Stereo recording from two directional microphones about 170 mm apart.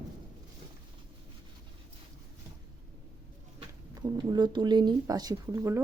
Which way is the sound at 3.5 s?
25° right (ahead or behind).